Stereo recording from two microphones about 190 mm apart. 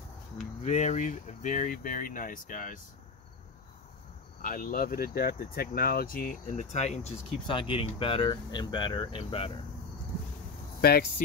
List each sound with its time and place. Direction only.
0.7 s speech: 35° left (ahead or behind)
4.4 s speech: 45° left (ahead or behind); by 9.5 s 30° left (ahead or behind)